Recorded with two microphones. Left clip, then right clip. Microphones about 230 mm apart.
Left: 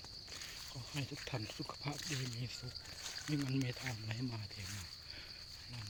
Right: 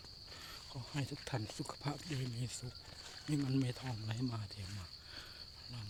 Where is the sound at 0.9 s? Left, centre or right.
Right.